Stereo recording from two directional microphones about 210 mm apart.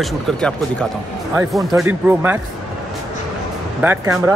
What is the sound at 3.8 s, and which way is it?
Speech, 10° right (ahead or behind).